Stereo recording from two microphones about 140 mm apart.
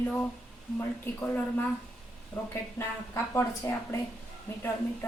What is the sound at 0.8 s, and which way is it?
Speech, 15° left (ahead or behind).